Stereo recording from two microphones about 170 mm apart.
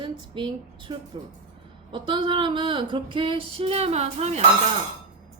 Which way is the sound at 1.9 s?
30° right (ahead or behind).